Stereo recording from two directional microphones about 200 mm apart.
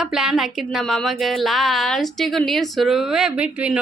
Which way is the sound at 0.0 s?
Centre (ahead or behind).